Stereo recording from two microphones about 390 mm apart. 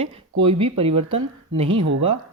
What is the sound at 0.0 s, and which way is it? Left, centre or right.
Speech, centre.